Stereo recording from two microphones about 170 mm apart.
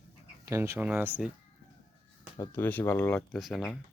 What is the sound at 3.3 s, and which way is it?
Speech, centre (ahead or behind).